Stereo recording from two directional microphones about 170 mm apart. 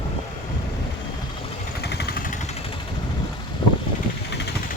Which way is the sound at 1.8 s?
75° left (ahead or behind).